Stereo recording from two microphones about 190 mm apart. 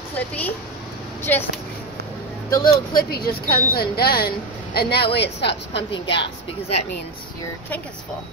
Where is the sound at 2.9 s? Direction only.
55° left (ahead or behind).